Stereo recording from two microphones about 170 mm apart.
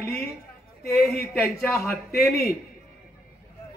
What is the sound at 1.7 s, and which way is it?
Speech, 15° left (ahead or behind).